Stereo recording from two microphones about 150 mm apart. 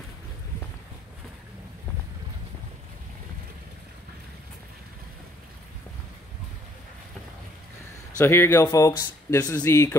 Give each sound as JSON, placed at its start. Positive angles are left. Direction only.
{"t": 8.2, "sound": "speech", "side_deg": 15}